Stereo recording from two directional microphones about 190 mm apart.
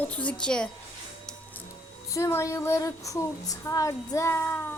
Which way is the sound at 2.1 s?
15° left (ahead or behind).